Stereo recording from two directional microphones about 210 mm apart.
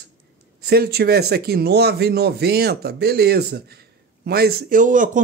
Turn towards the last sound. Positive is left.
turn(degrees=-40)  # may be behind; listen again after turning